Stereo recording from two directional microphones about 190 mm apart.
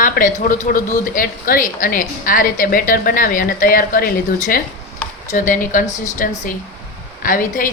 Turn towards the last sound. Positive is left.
turn(degrees=45)  # may be behind; listen again after turning